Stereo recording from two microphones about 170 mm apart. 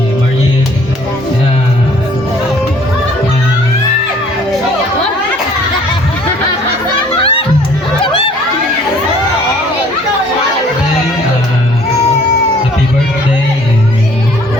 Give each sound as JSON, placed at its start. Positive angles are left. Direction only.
{"t": 7.2, "sound": "music", "side_deg": 35}